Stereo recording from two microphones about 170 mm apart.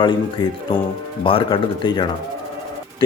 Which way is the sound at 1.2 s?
30° left (ahead or behind).